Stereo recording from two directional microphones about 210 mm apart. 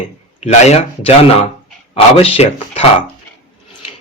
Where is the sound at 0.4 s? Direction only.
30° left (ahead or behind).